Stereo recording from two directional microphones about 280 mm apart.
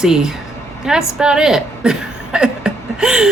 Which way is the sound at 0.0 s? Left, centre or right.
Centre.